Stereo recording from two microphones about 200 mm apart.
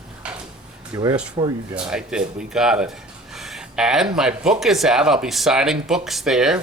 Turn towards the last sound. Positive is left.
turn(degrees=0)  # may be behind; listen again after turning